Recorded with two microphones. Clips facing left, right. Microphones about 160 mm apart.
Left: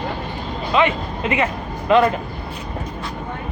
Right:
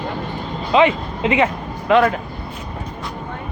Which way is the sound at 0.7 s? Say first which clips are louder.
Right 4 dB; 20° right (ahead or behind).